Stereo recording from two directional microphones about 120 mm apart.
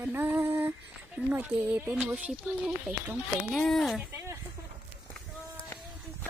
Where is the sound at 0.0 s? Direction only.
15° right (ahead or behind).